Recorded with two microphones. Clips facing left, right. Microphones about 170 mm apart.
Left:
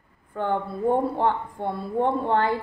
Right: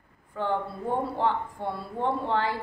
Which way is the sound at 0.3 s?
55° left (ahead or behind).